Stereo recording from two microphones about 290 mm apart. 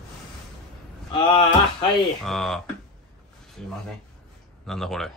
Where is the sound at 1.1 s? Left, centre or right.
Centre.